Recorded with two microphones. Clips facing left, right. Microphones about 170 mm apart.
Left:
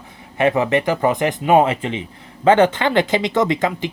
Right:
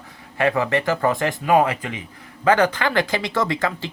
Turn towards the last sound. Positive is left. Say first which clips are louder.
# left 4 dB
turn(degrees=20)  # may be behind; listen again after turning